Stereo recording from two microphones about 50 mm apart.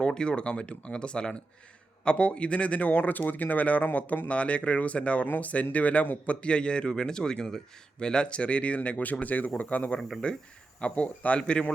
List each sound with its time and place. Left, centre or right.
0.0 s speech: centre
10.0 s speech: centre
10.8 s speech: left